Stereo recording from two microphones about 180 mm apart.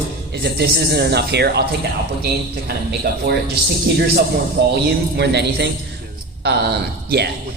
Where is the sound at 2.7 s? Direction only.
60° right (ahead or behind).